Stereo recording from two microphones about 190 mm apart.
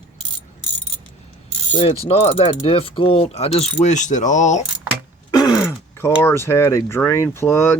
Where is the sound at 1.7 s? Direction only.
30° left (ahead or behind).